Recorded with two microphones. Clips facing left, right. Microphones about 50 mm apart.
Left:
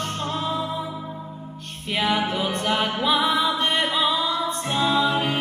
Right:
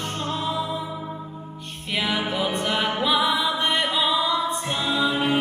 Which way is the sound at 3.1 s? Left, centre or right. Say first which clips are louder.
Left 1 dB; left.